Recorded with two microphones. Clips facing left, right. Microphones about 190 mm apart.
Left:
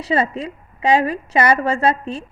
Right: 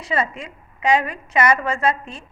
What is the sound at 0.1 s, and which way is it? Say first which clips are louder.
A woman's voice: left 4 dB; 35° left (ahead or behind).